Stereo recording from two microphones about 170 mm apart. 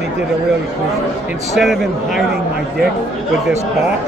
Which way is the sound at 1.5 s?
Centre (ahead or behind).